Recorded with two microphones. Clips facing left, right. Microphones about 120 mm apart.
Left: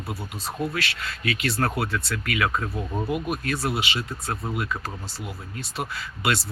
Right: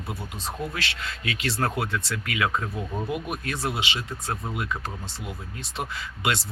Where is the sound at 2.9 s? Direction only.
20° left (ahead or behind).